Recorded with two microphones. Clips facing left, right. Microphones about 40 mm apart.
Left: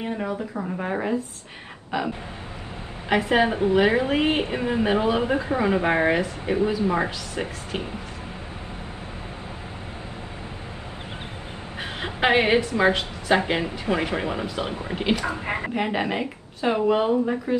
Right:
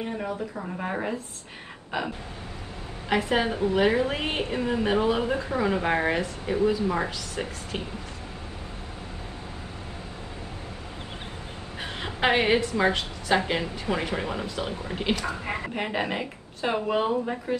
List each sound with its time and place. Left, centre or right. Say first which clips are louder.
0.2 s speech: left 3 dB; centre
1.9 s a sound: left 4 dB; centre
3.1 s a woman's voice: left 4 dB; centre
3.4 s a woman's voice: left 3 dB; left
11.8 s a sound: left 2 dB; centre
13.5 s a woman's voice: left 3 dB; centre
15.7 s speech: left 4 dB; centre